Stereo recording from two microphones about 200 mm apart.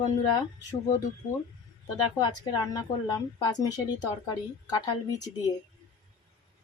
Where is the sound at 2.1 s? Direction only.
20° left (ahead or behind).